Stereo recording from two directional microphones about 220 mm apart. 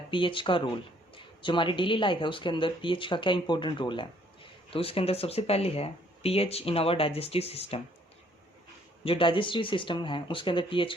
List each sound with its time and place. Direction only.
0.1 s speech: 20° left (ahead or behind)
9.0 s speech: 25° left (ahead or behind)